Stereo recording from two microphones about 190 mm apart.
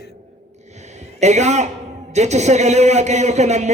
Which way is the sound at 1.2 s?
35° right (ahead or behind).